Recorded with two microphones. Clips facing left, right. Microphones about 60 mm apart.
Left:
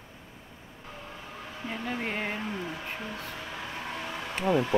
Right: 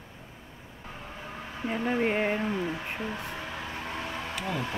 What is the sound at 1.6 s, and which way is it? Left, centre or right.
Speech, centre.